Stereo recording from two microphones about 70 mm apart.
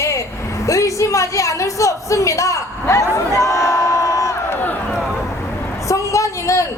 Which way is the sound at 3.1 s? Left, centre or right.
Left.